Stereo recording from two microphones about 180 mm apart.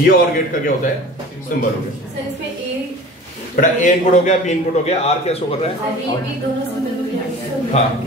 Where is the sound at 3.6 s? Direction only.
45° left (ahead or behind).